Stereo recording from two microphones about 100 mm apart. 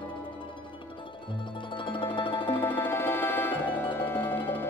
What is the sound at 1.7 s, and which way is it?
Music, 55° left (ahead or behind).